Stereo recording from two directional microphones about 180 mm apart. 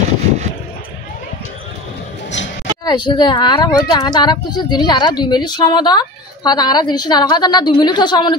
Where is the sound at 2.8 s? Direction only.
25° left (ahead or behind).